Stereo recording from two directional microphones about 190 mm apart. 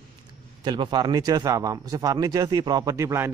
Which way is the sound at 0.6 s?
25° right (ahead or behind).